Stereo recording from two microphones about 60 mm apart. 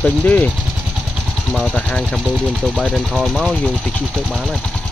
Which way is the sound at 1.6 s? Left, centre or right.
Centre.